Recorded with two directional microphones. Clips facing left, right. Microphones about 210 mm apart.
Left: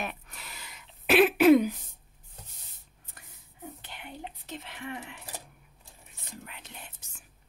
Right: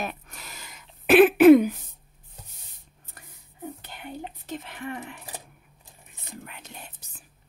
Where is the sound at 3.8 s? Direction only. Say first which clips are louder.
Right 5 dB; 40° right (ahead or behind).